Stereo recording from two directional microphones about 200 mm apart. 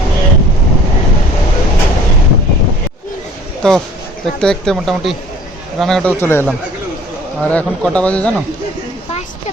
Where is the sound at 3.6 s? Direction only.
5° left (ahead or behind).